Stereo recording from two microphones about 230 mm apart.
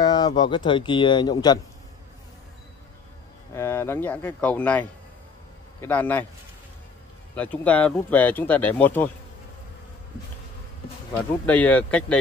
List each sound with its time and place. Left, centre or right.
0.0 s a sound: centre
0.7 s speech: left
3.5 s speech: centre
7.3 s speech: centre
11.1 s speech: centre